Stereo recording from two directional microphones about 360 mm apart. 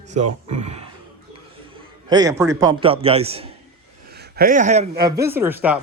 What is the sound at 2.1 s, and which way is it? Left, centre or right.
A man's voice, centre.